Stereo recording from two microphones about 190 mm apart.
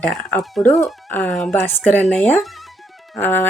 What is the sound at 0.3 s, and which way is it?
Speech, 5° left (ahead or behind).